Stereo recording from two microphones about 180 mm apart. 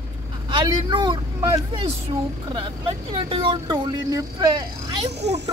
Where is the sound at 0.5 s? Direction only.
25° right (ahead or behind).